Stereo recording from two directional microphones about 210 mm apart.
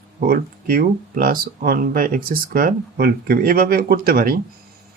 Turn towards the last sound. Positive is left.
turn(degrees=-45)  # may be behind; listen again after turning